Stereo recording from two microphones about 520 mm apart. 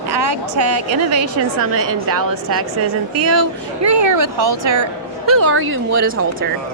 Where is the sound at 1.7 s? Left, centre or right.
Right.